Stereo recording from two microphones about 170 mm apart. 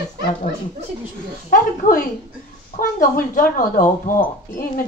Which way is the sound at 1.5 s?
50° left (ahead or behind).